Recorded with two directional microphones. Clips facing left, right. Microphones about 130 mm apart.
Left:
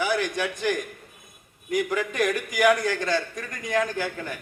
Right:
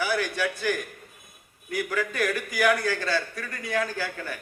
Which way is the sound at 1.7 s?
20° left (ahead or behind).